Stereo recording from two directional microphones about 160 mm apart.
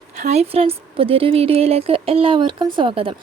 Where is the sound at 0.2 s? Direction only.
45° right (ahead or behind).